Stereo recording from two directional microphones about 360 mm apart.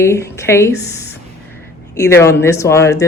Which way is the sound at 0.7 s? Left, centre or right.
Left.